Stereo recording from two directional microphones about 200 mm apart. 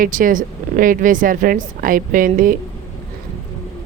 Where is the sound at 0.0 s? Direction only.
45° right (ahead or behind).